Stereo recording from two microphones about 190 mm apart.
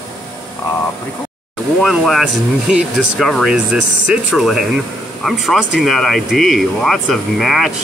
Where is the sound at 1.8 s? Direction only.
Centre (ahead or behind).